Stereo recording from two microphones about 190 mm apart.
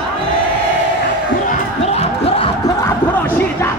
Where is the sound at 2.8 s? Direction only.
15° left (ahead or behind).